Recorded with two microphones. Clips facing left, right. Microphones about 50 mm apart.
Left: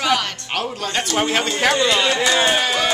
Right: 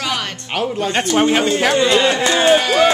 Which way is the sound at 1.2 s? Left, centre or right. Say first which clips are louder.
Right 5 dB; centre.